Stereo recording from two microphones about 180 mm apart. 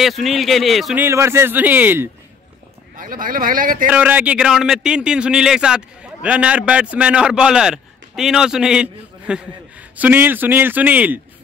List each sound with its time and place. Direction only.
0.0 s a man's voice: centre (ahead or behind)
1.0 s a man's voice: 15° right (ahead or behind)
3.0 s speech: 50° right (ahead or behind)
3.9 s a man's voice: 10° right (ahead or behind)